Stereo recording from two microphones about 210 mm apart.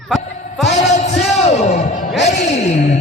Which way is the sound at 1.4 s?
30° left (ahead or behind).